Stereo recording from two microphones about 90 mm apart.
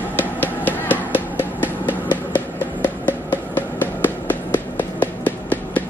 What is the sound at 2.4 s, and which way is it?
Music, 20° left (ahead or behind).